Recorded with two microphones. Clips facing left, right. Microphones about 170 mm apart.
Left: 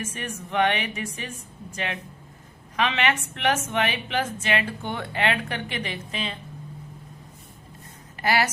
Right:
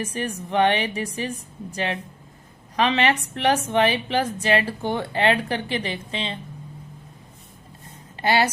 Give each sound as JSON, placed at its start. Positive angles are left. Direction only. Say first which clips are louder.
{"t": 0.0, "sound": "a woman's voice", "louder": "right 5 dB", "side_deg": -35}
{"t": 8.2, "sound": "speech", "louder": "right 3 dB", "side_deg": -25}